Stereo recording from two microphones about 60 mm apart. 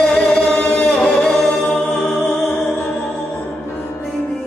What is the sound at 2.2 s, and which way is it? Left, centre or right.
Music, left.